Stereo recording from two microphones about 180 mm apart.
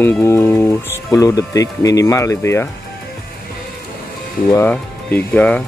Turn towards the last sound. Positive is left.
turn(degrees=5)  # may be behind; listen again after turning